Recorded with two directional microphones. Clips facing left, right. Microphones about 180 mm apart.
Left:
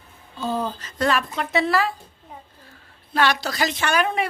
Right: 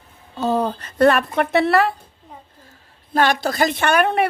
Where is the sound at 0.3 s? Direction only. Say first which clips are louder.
Right 6 dB; 65° right (ahead or behind).